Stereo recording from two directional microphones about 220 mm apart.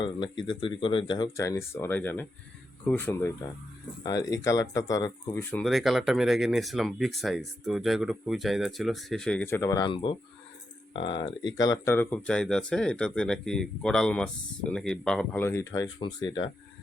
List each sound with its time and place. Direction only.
0.0 s speech: 20° left (ahead or behind)